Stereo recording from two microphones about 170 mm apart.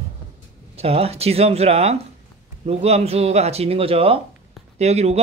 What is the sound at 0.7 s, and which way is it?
Speech, 35° right (ahead or behind).